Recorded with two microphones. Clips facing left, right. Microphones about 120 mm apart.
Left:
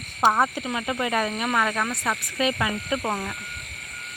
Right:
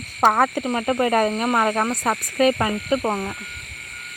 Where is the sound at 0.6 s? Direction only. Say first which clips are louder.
Right 6 dB; 40° right (ahead or behind).